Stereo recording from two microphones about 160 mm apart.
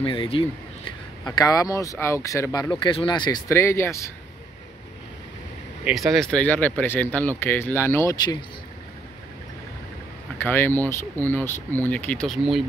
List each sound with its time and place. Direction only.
0.0 s speech: 35° left (ahead or behind)
2.7 s speech: 30° left (ahead or behind)
5.9 s speech: centre (ahead or behind); by 8.4 s 20° left (ahead or behind)
10.4 s speech: 15° left (ahead or behind)